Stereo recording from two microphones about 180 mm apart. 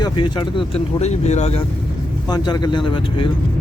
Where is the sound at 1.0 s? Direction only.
40° left (ahead or behind).